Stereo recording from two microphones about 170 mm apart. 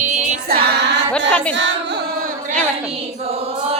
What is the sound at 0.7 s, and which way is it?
Female singing, 85° right.